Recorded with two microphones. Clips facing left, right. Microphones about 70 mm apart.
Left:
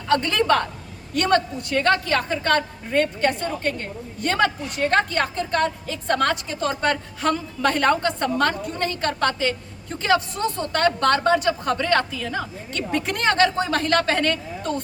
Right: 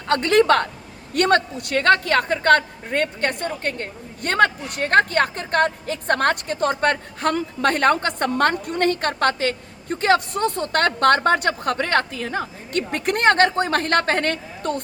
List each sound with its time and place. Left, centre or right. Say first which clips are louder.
0.1 s a woman's voice: right 3 dB; right